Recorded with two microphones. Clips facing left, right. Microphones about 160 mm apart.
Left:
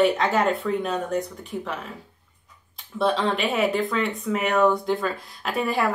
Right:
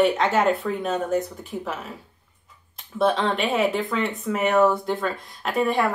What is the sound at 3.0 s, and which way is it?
Speech, centre (ahead or behind).